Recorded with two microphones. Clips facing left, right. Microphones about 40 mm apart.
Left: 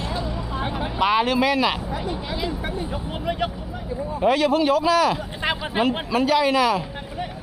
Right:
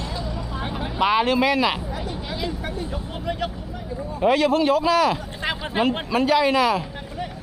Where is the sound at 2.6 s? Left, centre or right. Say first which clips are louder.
Left 1 dB; centre.